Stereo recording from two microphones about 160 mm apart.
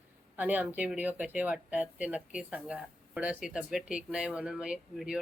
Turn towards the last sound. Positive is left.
turn(degrees=-5)  # may be behind; listen again after turning